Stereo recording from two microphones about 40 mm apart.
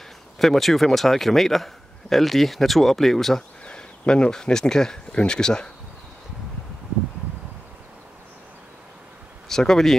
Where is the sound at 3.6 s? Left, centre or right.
Left.